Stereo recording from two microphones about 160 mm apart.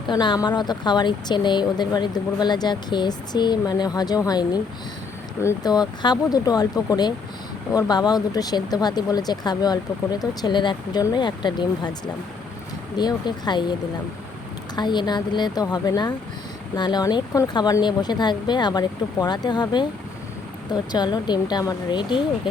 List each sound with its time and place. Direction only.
0.1 s speech: 25° left (ahead or behind)
14.8 s speech: 25° left (ahead or behind)